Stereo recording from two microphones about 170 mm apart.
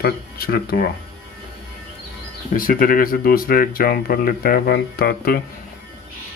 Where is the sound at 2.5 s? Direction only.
55° left (ahead or behind).